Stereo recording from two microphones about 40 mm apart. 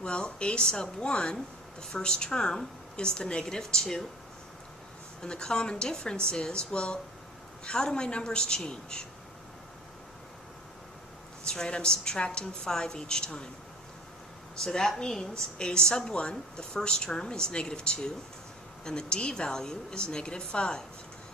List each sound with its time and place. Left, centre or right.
0.0 s speech: left
5.2 s speech: centre
11.4 s speech: centre
14.6 s speech: centre